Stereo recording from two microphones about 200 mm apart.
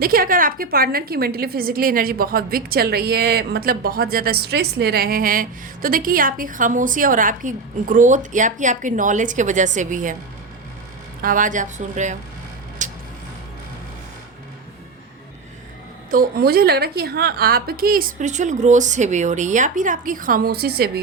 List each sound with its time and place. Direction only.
0.0 s a woman's voice: 45° right (ahead or behind)
11.2 s a woman's voice: 40° right (ahead or behind)
12.8 s vehicle: 40° right (ahead or behind)
16.1 s a woman's voice: 45° right (ahead or behind)